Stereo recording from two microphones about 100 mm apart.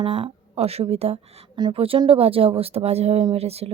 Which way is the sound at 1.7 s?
65° right (ahead or behind).